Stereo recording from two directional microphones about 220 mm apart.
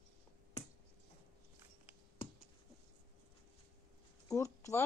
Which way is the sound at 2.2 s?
35° left (ahead or behind).